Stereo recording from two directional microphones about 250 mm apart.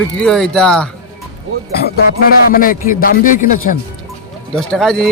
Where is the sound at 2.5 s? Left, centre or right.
Left.